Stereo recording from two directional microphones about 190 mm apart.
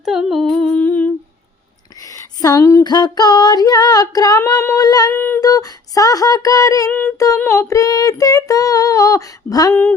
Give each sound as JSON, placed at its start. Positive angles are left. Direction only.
{"t": 0.0, "sound": "humming", "side_deg": -5}
{"t": 2.0, "sound": "female singing", "side_deg": 20}